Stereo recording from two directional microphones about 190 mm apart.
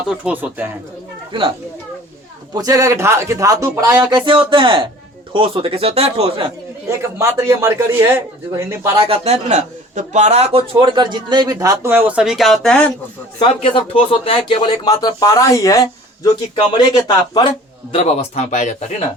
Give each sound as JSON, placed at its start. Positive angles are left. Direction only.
{"t": 0.0, "sound": "speech", "side_deg": -5}
{"t": 1.3, "sound": "a man's voice", "side_deg": -25}
{"t": 6.8, "sound": "speech", "side_deg": -15}
{"t": 9.0, "sound": "a man's voice", "side_deg": -30}
{"t": 13.4, "sound": "speech", "side_deg": 30}